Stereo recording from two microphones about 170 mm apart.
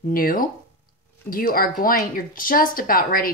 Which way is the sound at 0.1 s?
55° left (ahead or behind).